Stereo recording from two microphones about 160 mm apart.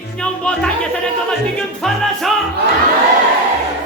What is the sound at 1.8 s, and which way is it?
Music, centre (ahead or behind).